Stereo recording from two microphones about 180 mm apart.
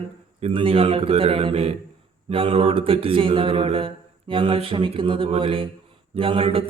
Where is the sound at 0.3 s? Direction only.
35° right (ahead or behind).